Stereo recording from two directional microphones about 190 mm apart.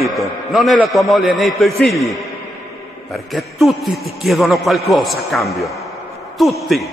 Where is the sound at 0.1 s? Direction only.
Centre (ahead or behind).